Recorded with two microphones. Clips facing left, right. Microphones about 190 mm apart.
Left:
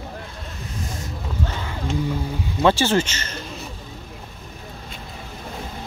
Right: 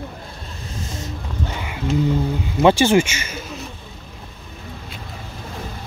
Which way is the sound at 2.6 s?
15° right (ahead or behind).